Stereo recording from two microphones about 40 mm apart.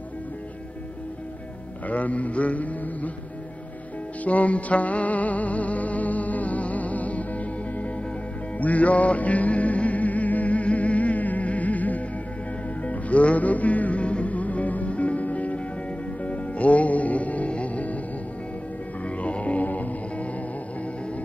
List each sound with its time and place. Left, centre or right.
1.9 s mantra: left
4.2 s music: left
19.0 s music: left